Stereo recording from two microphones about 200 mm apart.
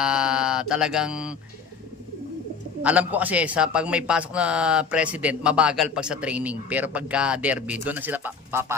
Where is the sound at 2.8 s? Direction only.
5° right (ahead or behind).